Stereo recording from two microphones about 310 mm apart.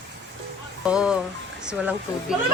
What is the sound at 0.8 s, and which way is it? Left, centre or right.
Speech, centre.